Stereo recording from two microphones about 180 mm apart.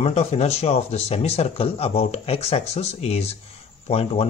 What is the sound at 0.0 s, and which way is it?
Speech, 40° left (ahead or behind).